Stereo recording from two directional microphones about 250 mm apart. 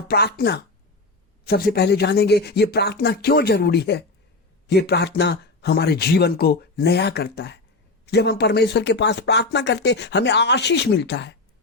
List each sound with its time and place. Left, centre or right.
0.1 s speech: left